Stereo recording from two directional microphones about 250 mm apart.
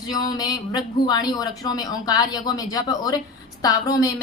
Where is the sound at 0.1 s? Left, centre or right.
Centre.